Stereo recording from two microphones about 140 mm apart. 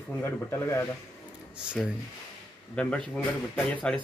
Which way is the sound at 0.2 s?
15° left (ahead or behind).